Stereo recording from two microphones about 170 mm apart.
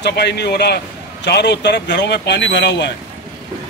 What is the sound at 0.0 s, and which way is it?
Speech, 75° left (ahead or behind).